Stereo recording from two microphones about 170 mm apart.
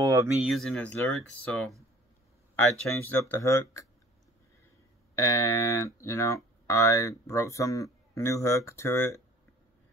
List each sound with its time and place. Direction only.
0.0 s speech: 20° right (ahead or behind)
0.4 s speech: centre (ahead or behind); by 3.8 s 20° left (ahead or behind)
5.1 s speech: 15° left (ahead or behind)